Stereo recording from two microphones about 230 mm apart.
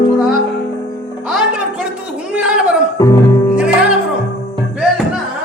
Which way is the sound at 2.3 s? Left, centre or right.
Centre.